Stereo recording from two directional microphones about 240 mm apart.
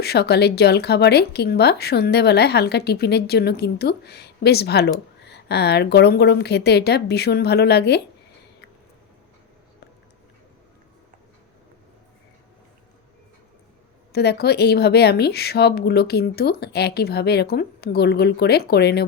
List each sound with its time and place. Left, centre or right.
0.0 s speech: left
14.1 s a woman's voice: left